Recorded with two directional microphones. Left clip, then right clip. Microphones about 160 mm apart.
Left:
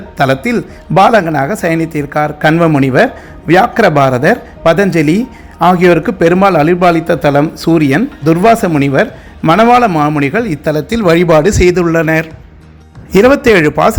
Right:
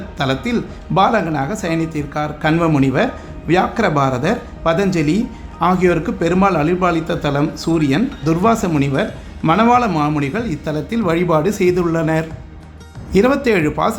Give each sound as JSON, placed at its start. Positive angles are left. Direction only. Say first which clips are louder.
{"t": 0.2, "sound": "a man's voice", "louder": "left 8 dB", "side_deg": 40}
{"t": 13.1, "sound": "a man's voice", "louder": "left 8 dB", "side_deg": 35}